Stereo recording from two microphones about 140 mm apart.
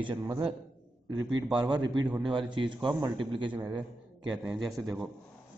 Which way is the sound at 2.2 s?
35° right (ahead or behind).